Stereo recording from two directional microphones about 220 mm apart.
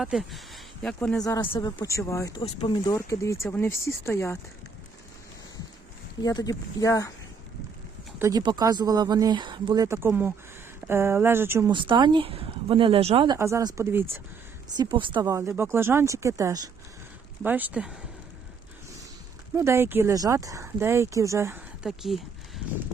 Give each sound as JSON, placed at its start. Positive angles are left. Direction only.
{"t": 0.0, "sound": "speech", "side_deg": 0}
{"t": 1.2, "sound": "speech", "side_deg": 20}
{"t": 2.4, "sound": "speech", "side_deg": 25}
{"t": 6.2, "sound": "speech", "side_deg": 15}
{"t": 8.2, "sound": "speech", "side_deg": -20}
{"t": 11.7, "sound": "speech", "side_deg": -20}
{"t": 14.8, "sound": "speech", "side_deg": -20}
{"t": 19.5, "sound": "speech", "side_deg": -10}
{"t": 21.8, "sound": "speech", "side_deg": 0}